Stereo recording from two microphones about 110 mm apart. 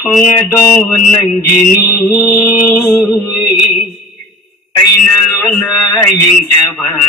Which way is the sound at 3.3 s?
5° left (ahead or behind).